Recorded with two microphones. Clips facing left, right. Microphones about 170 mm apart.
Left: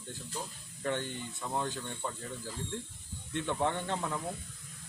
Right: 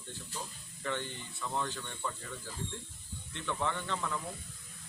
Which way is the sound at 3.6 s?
50° left (ahead or behind).